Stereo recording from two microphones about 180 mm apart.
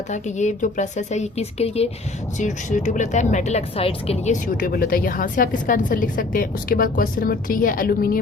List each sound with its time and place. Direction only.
0.1 s a woman's voice: 40° left (ahead or behind)